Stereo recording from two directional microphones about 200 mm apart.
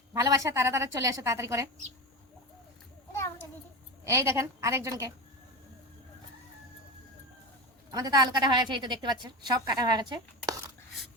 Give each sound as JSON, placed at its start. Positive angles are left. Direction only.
{"t": 0.1, "sound": "a woman's voice", "side_deg": -15}
{"t": 4.0, "sound": "a woman's voice", "side_deg": -15}
{"t": 7.9, "sound": "a woman's voice", "side_deg": -20}